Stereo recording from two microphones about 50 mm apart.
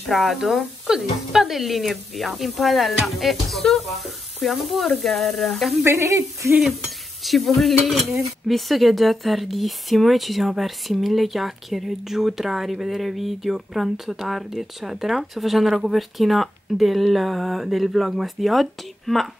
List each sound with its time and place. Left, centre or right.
0.0 s speech: centre
5.9 s speech: right
7.2 s speech: centre